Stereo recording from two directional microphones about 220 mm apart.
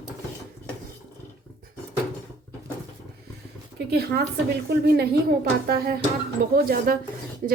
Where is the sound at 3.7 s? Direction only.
45° right (ahead or behind).